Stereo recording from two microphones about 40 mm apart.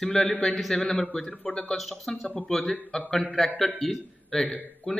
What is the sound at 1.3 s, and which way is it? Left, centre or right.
Speech, left.